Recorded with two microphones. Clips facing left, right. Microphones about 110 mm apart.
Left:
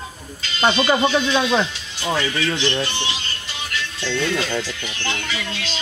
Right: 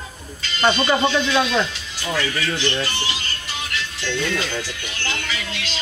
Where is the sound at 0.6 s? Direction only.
20° left (ahead or behind).